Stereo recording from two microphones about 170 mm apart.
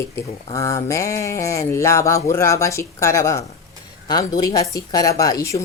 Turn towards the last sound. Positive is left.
turn(degrees=20)  # may be behind; listen again after turning